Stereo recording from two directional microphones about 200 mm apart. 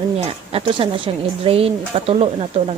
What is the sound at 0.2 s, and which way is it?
Speech, 30° right (ahead or behind).